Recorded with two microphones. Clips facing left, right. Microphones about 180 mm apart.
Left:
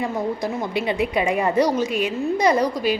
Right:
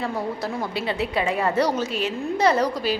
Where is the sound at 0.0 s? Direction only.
15° left (ahead or behind).